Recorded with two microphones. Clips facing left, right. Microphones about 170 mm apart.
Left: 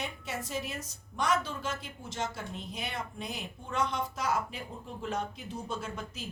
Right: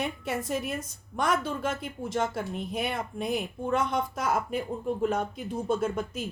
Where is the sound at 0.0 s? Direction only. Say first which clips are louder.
Right 7 dB; 55° right (ahead or behind).